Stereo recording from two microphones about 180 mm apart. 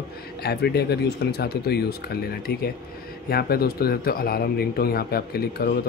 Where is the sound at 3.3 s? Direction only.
60° left (ahead or behind).